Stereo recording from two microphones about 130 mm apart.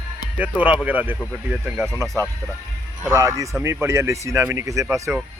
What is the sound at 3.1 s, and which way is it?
Speech, 25° right (ahead or behind).